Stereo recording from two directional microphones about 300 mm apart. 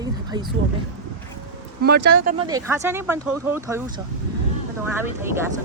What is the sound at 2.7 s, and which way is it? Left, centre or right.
Speech, centre.